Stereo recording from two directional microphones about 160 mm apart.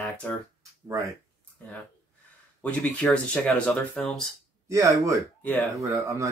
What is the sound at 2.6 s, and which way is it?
Speech, 5° left (ahead or behind).